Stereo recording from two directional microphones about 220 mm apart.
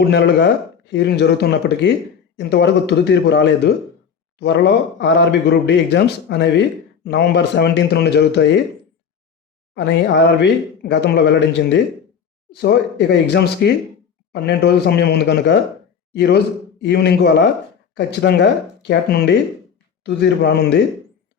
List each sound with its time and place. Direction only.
0.1 s speech: 50° left (ahead or behind)
9.7 s speech: 50° left (ahead or behind)